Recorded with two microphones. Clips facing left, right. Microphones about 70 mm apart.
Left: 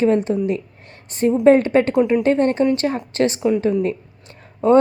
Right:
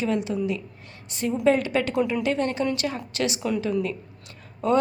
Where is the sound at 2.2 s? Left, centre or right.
Left.